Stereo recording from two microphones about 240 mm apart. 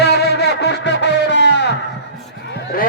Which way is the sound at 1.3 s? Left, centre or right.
Left.